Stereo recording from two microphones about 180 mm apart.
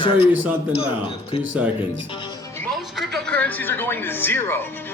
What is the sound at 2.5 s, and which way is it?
Speech, 5° left (ahead or behind).